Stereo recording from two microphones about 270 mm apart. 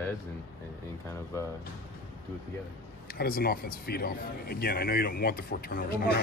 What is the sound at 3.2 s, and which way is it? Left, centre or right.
Speech, left.